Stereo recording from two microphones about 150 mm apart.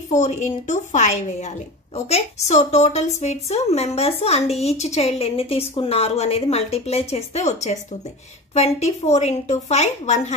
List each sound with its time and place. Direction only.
0.1 s a woman's voice: 55° left (ahead or behind)
8.5 s a woman's voice: 45° left (ahead or behind)